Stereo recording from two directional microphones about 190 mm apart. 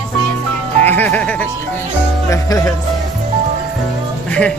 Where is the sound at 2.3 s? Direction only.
20° left (ahead or behind).